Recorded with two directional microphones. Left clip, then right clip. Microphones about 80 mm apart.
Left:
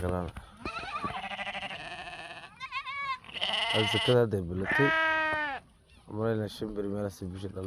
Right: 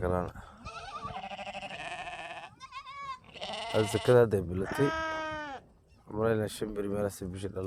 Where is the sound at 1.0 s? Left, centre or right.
Right.